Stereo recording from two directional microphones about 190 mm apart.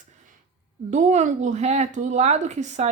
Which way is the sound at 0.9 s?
40° right (ahead or behind).